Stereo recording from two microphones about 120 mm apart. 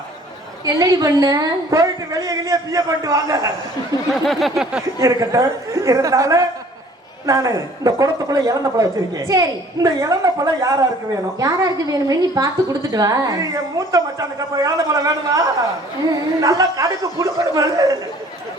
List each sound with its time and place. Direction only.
0.6 s a woman's voice: 25° right (ahead or behind)
4.3 s a sound: centre (ahead or behind)
4.9 s a woman's voice: 25° right (ahead or behind)